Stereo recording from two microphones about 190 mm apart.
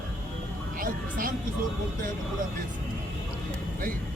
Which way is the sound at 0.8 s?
45° right (ahead or behind).